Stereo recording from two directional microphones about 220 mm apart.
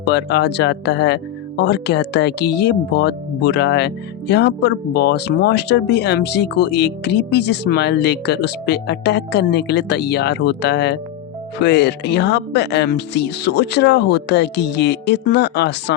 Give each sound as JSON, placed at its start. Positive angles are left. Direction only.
{"t": 0.0, "sound": "speech", "side_deg": 50}